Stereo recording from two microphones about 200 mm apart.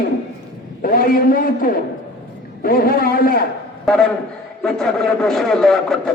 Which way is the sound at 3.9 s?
5° left (ahead or behind).